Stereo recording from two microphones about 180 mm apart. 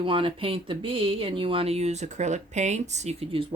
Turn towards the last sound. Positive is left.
turn(degrees=-30)  # may be behind; listen again after turning